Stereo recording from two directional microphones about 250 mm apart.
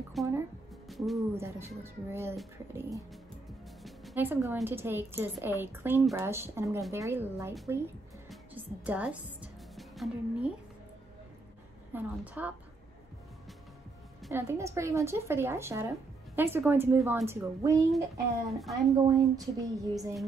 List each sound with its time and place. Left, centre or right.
0.2 s music: centre
0.8 s a woman's voice: centre
8.3 s music: centre
11.9 s a woman's voice: centre
14.2 s a woman's voice: centre
18.5 s speech: centre
18.9 s a woman's voice: centre